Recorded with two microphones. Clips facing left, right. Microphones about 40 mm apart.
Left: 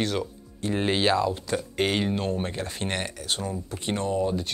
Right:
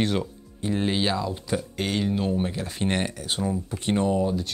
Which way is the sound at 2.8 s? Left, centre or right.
Centre.